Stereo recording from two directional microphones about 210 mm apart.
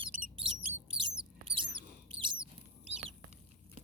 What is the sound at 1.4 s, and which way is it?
Mouse, 25° right (ahead or behind).